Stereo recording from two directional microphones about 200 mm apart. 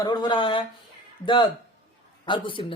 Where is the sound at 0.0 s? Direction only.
20° left (ahead or behind).